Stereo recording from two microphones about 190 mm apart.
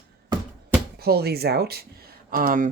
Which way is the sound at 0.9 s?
55° right (ahead or behind).